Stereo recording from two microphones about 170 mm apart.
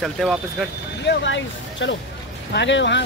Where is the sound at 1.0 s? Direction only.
90° left.